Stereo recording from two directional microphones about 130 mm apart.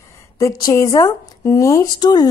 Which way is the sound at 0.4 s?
30° left (ahead or behind).